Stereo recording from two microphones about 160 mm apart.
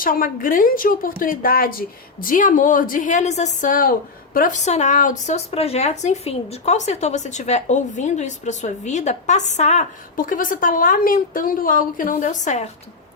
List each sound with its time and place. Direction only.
0.0 s a woman's voice: 60° left (ahead or behind); by 9.8 s 45° left (ahead or behind)
10.2 s a woman's voice: 60° left (ahead or behind)